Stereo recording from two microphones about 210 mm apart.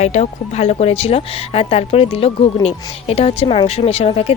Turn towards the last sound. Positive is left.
turn(degrees=30)  # may be behind; listen again after turning